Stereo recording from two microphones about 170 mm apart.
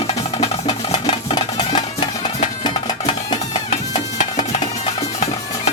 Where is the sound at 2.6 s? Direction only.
25° left (ahead or behind).